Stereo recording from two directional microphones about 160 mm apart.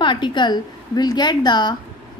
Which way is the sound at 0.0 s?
30° left (ahead or behind).